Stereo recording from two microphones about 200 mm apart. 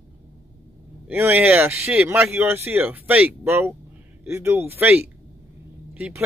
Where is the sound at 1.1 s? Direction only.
10° right (ahead or behind).